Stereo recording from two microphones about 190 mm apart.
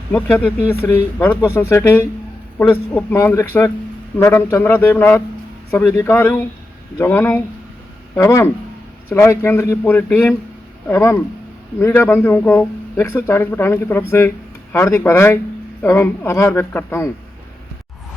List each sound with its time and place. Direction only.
0.1 s speech: 10° left (ahead or behind)